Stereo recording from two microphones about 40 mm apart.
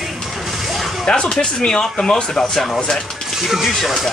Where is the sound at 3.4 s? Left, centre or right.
Centre.